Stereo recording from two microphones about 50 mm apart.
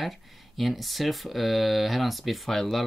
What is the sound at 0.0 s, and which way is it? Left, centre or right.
Speech, centre.